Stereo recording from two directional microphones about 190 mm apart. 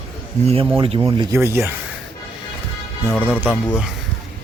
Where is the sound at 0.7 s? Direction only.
30° right (ahead or behind); by 1.7 s 15° right (ahead or behind).